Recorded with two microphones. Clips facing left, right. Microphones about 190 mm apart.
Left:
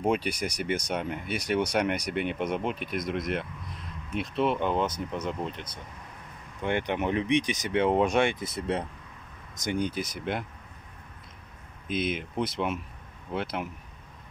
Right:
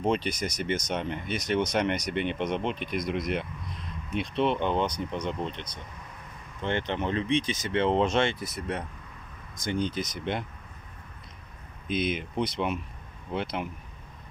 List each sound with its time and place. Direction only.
0.0 s speech: 10° left (ahead or behind)
8.5 s speech: 30° left (ahead or behind)
9.6 s speech: 10° left (ahead or behind)
11.9 s speech: centre (ahead or behind)